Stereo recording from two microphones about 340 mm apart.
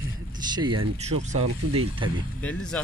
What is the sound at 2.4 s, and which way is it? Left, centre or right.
Speech, centre.